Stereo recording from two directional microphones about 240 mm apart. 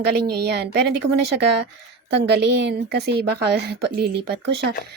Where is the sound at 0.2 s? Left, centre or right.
Right.